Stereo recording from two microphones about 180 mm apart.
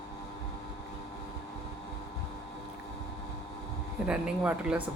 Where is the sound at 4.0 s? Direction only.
5° right (ahead or behind).